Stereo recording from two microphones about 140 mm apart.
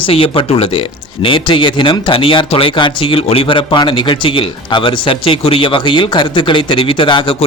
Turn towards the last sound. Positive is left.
turn(degrees=40)  # may be behind; listen again after turning